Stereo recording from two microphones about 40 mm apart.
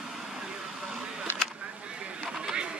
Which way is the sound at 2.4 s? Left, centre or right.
Centre.